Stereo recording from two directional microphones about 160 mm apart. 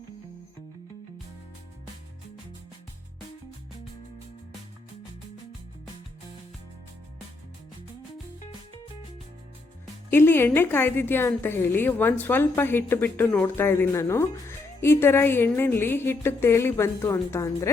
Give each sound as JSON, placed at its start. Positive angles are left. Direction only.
{"t": 10.1, "sound": "a woman's voice", "side_deg": 15}